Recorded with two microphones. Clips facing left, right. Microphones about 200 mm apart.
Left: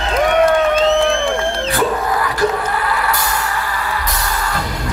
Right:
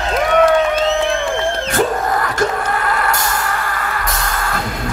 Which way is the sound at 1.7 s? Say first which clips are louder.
Right 1 dB; 45° right (ahead or behind).